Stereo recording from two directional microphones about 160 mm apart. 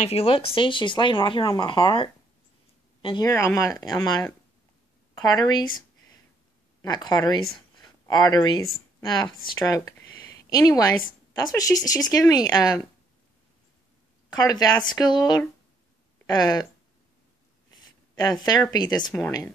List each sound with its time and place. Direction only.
0.0 s speech: 40° left (ahead or behind)
3.3 s speech: 20° left (ahead or behind)
14.3 s speech: 25° left (ahead or behind)
17.7 s speech: 25° left (ahead or behind)